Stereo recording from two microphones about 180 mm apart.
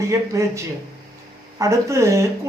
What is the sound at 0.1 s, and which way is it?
A man's voice, 15° right (ahead or behind).